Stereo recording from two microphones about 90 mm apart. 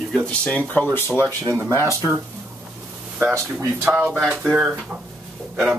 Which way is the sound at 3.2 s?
25° right (ahead or behind).